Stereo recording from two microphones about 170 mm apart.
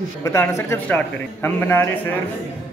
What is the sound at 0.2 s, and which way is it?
A man's voice, 15° left (ahead or behind).